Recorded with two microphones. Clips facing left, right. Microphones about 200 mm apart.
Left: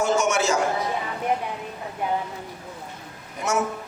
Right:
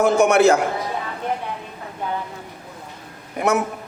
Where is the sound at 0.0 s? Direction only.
60° right (ahead or behind).